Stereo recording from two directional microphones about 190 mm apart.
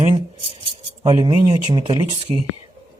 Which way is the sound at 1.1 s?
25° right (ahead or behind).